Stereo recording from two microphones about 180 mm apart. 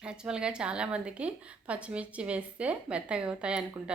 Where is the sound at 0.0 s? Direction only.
5° right (ahead or behind).